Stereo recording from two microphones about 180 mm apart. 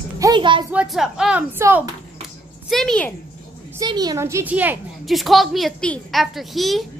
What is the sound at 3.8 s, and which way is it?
A woman's voice, 20° right (ahead or behind).